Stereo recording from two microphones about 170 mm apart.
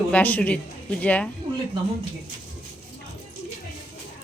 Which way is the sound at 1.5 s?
30° right (ahead or behind).